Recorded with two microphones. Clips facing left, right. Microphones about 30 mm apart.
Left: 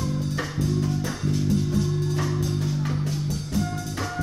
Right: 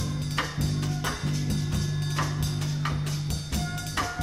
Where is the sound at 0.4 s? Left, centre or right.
Right.